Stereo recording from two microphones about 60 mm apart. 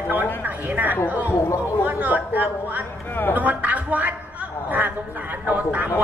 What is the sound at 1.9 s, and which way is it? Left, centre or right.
A woman's voice, right.